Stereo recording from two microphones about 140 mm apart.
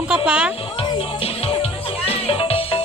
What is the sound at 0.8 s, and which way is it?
Music, 40° left (ahead or behind).